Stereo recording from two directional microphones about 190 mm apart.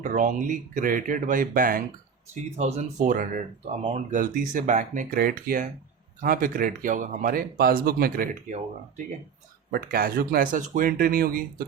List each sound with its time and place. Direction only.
0.0 s speech: 45° right (ahead or behind)
2.3 s speech: 35° right (ahead or behind)
4.2 s speech: 45° right (ahead or behind)
9.7 s speech: 50° right (ahead or behind)